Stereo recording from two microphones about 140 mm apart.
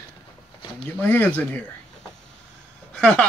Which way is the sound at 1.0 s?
15° left (ahead or behind).